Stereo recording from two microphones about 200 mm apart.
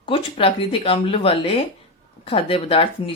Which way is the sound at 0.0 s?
25° left (ahead or behind).